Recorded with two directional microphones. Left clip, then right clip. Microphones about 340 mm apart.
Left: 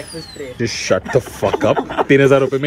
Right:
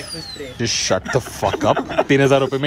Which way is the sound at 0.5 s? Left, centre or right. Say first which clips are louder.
Right 1 dB; right.